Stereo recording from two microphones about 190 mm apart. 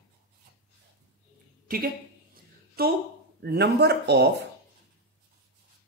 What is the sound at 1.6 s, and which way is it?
A woman's voice, 50° right (ahead or behind).